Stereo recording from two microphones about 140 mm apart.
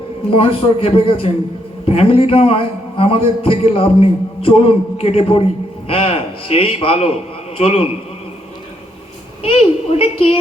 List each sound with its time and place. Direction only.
0.3 s a man's voice: 40° left (ahead or behind)
9.4 s a man's voice: 45° left (ahead or behind)